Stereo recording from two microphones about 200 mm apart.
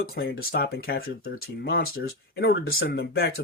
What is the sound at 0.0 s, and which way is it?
Speech, 50° left (ahead or behind).